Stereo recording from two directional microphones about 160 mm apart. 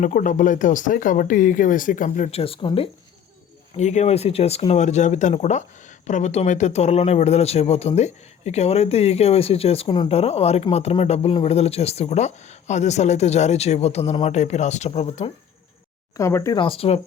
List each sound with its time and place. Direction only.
0.0 s speech: 55° left (ahead or behind); by 2.9 s 35° left (ahead or behind)
3.8 s speech: 45° left (ahead or behind)
16.1 s speech: 20° left (ahead or behind)
16.6 s speech: 35° left (ahead or behind)